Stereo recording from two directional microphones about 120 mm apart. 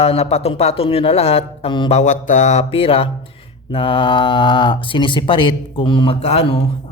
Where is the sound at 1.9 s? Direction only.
80° left.